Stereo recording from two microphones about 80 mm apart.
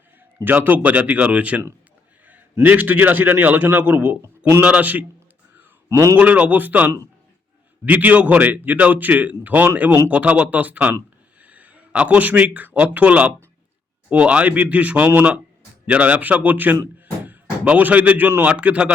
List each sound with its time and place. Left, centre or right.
0.4 s a man's voice: right
5.9 s a man's voice: right
6.1 s a man's voice: centre